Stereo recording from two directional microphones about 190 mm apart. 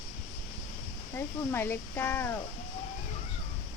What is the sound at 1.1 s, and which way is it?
Speech, 10° left (ahead or behind).